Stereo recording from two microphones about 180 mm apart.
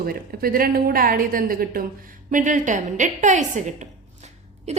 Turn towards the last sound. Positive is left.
turn(degrees=-40)  # may be behind; listen again after turning